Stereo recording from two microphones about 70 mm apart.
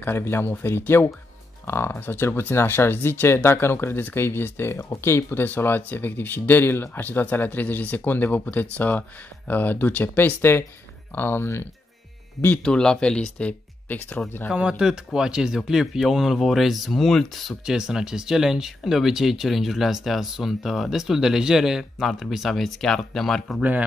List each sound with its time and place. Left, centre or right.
0.0 s speech: left
12.6 s speech: centre; by 14.2 s left
14.5 s a man's voice: centre
23.6 s speech: right